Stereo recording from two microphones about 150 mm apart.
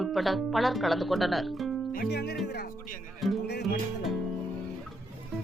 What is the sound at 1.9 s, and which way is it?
Speech, 80° left.